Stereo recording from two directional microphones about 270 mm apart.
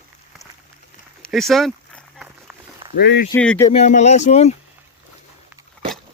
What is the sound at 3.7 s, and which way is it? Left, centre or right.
Speech, left.